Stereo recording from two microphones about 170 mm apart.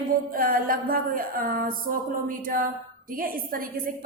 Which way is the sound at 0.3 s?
55° right (ahead or behind).